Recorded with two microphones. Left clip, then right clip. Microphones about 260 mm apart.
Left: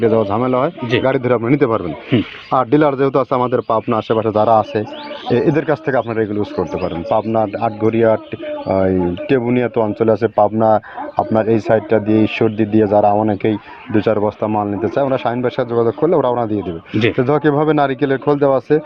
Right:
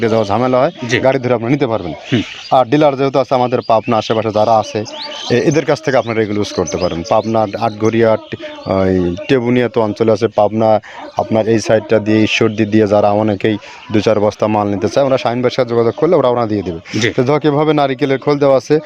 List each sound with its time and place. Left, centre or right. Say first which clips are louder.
0.0 s speech: right 1 dB; right
5.3 s speech: right 2 dB; right
9.3 s speech: right 3 dB; right